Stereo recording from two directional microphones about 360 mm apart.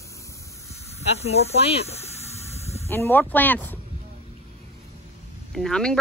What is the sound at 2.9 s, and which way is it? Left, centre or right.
Speech, centre.